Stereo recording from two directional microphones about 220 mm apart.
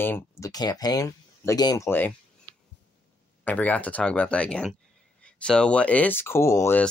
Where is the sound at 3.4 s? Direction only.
5° left (ahead or behind).